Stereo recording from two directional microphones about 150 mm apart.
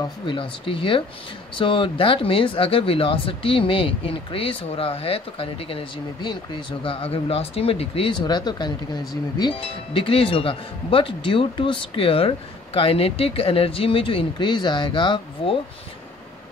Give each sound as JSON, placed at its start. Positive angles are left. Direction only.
{"t": 0.3, "sound": "speech", "side_deg": 35}